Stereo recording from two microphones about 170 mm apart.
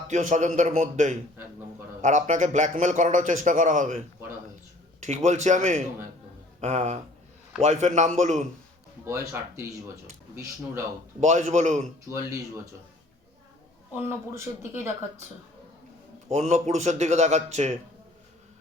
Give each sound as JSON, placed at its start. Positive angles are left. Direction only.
{"t": 0.1, "sound": "a man's voice", "side_deg": -45}
{"t": 5.0, "sound": "a man's voice", "side_deg": -45}
{"t": 9.0, "sound": "speech", "side_deg": -15}
{"t": 11.2, "sound": "a man's voice", "side_deg": -45}
{"t": 13.9, "sound": "speech", "side_deg": -15}
{"t": 16.3, "sound": "a man's voice", "side_deg": -40}